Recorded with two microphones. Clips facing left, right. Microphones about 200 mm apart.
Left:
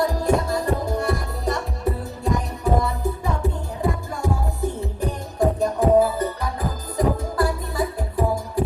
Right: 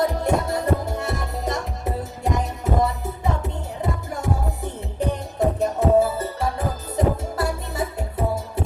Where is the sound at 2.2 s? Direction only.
20° right (ahead or behind).